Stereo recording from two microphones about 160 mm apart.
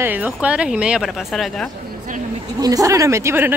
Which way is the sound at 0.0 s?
10° right (ahead or behind).